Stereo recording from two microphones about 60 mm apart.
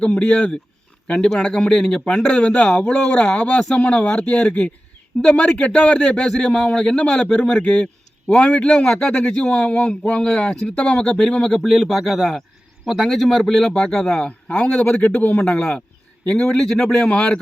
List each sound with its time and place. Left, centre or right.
0.2 s a man's voice: left; by 14.3 s centre
14.3 s a man's voice: left
16.5 s speech: centre
16.9 s speech: centre